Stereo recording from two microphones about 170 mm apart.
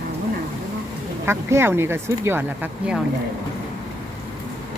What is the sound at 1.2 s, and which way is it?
Speech, 15° right (ahead or behind).